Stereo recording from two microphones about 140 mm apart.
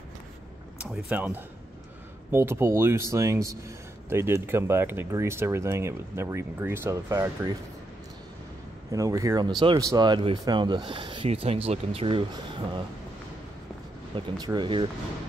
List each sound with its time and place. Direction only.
0.7 s speech: 5° right (ahead or behind); by 7.5 s 25° right (ahead or behind)
8.9 s speech: 25° right (ahead or behind); by 12.3 s 40° right (ahead or behind)
14.1 s speech: 30° right (ahead or behind)